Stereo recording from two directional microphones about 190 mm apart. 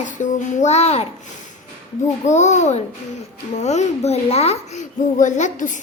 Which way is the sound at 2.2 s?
40° left (ahead or behind).